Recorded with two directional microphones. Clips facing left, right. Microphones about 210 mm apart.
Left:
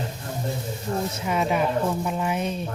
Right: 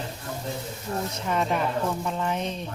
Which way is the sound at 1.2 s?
5° left (ahead or behind).